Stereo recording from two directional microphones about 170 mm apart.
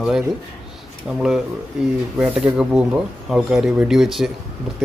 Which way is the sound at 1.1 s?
Centre (ahead or behind).